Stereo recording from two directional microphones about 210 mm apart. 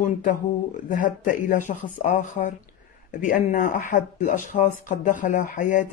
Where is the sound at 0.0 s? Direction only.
40° left (ahead or behind).